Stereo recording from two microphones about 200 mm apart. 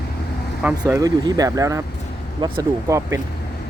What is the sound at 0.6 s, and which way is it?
Speech, 10° right (ahead or behind).